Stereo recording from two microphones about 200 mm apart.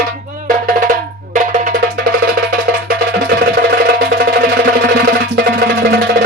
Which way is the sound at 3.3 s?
50° right (ahead or behind).